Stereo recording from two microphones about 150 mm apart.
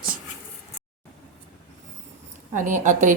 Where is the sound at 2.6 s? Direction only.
55° right (ahead or behind).